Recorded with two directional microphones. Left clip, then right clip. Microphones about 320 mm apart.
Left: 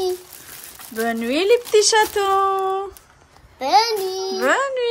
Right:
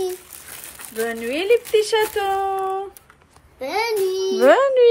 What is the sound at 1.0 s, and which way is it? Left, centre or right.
Speech, centre.